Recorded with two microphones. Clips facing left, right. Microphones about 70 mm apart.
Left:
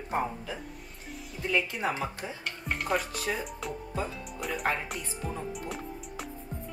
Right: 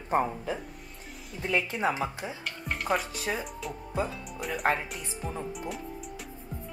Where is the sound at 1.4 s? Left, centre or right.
Right.